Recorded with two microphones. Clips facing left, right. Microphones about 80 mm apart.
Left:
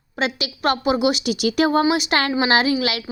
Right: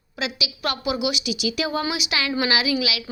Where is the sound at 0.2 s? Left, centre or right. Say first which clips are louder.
Left 5 dB; left.